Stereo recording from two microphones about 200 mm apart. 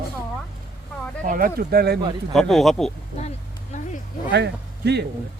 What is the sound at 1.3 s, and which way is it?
Speech, 45° right (ahead or behind).